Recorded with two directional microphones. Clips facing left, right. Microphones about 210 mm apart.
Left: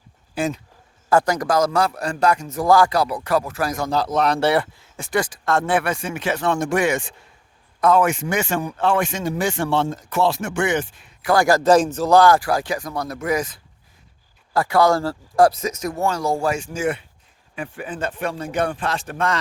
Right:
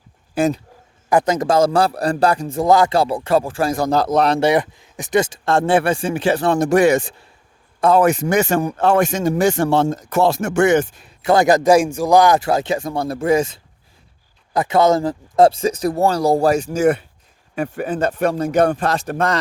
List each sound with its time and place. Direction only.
0.3 s speech: 40° right (ahead or behind)
1.1 s speech: 20° right (ahead or behind)
3.8 s speech: 45° right (ahead or behind)
4.4 s speech: 15° right (ahead or behind); by 11.1 s 40° right (ahead or behind)
11.2 s speech: 25° right (ahead or behind); by 19.4 s 40° right (ahead or behind)